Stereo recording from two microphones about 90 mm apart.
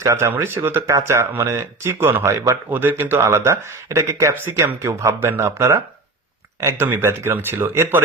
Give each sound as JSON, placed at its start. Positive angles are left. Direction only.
{"t": 0.0, "sound": "speech", "side_deg": -30}